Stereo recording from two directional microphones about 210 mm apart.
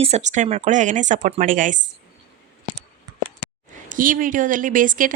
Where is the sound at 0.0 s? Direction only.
30° right (ahead or behind).